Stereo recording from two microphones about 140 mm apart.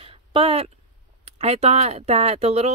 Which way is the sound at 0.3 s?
40° right (ahead or behind).